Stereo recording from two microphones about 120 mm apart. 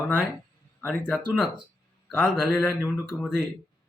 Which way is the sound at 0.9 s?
10° left (ahead or behind).